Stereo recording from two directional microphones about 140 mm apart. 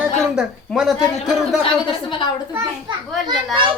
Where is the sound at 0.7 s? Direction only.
Centre (ahead or behind).